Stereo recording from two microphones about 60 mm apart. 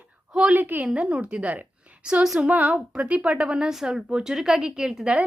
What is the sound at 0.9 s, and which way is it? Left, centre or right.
Speech, centre.